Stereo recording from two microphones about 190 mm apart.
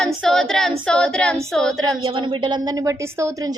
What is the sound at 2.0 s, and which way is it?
A woman's voice, 25° right (ahead or behind).